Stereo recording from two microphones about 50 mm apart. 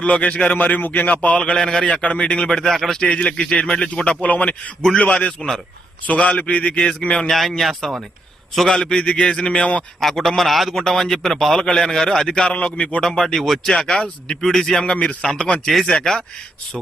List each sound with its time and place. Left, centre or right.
0.0 s a man's voice: left
1.4 s a man's voice: centre
1.9 s a man's voice: left
2.7 s a man's voice: centre
3.0 s a man's voice: left
4.1 s a man's voice: left
7.3 s a man's voice: centre; by 9.8 s left
10.0 s a man's voice: centre
13.0 s a man's voice: centre